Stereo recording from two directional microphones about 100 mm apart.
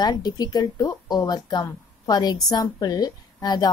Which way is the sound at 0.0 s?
45° left (ahead or behind).